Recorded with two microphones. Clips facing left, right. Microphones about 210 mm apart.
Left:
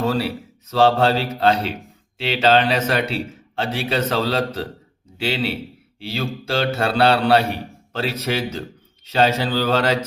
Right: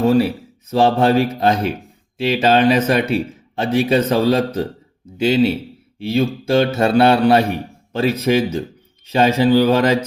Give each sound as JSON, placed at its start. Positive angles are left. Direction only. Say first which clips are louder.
{"t": 0.7, "sound": "a man's voice", "louder": "right 2 dB", "side_deg": -15}
{"t": 5.2, "sound": "mantra", "louder": "right 8 dB", "side_deg": -20}
{"t": 7.9, "sound": "a man's voice", "louder": "right 7 dB", "side_deg": -15}